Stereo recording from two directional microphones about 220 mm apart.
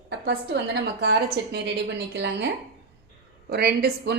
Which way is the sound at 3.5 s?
45° right (ahead or behind).